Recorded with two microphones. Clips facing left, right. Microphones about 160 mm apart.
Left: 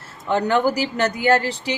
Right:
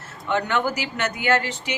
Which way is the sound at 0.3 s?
35° left (ahead or behind).